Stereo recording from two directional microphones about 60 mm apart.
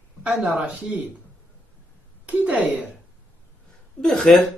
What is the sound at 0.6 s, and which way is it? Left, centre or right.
Speech, centre.